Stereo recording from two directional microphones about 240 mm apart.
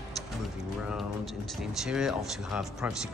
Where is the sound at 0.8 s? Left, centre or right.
Centre.